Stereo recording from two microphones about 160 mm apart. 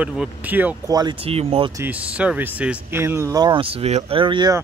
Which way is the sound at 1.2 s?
35° right (ahead or behind).